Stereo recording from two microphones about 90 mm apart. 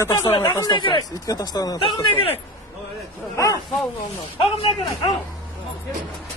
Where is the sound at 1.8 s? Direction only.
80° left.